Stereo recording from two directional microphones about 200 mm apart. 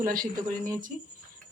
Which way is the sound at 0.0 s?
45° right (ahead or behind).